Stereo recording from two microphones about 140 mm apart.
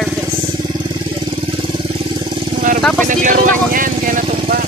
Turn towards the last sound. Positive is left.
turn(degrees=-75)  # may be behind; listen again after turning